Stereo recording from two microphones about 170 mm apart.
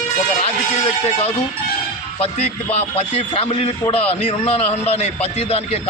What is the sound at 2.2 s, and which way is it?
A man's voice, 35° left (ahead or behind).